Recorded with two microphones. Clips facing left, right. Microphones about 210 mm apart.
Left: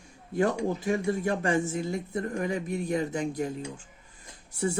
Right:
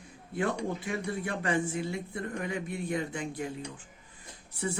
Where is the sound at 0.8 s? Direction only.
40° left (ahead or behind).